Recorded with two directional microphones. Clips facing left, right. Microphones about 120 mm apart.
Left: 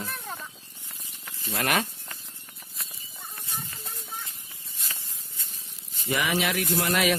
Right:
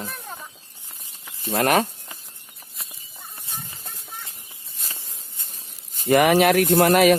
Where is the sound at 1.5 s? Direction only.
40° right (ahead or behind).